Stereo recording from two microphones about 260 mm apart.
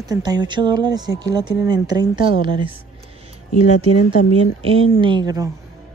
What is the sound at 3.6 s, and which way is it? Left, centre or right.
Speech, left.